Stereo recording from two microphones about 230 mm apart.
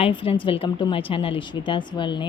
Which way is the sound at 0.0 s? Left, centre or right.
Left.